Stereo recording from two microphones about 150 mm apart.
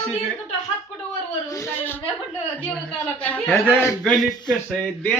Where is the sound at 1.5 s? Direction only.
15° left (ahead or behind).